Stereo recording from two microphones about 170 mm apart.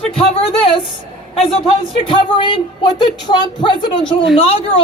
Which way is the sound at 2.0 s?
30° left (ahead or behind).